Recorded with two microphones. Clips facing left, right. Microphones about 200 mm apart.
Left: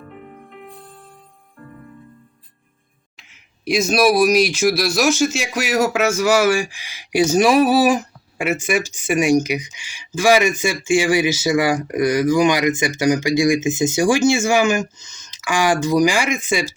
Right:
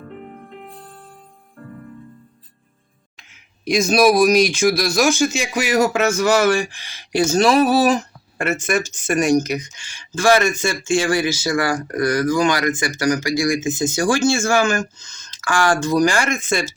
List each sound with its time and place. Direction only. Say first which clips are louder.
3.2 s speech: even; 5° left (ahead or behind)